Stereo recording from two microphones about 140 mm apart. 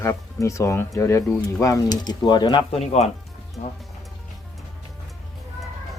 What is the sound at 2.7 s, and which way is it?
Speech, 50° left (ahead or behind).